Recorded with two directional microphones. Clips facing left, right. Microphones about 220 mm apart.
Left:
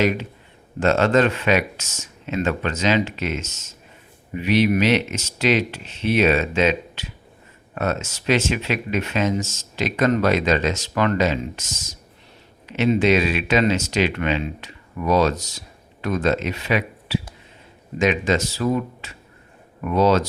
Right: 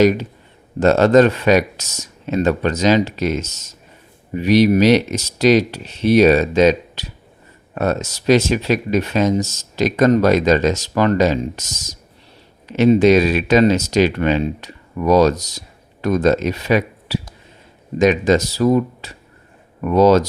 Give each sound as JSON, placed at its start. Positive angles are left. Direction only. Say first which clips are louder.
{"t": 0.0, "sound": "speech", "louder": "right 7 dB", "side_deg": -40}